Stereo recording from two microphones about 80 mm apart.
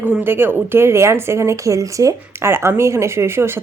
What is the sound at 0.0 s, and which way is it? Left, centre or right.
Speech, right.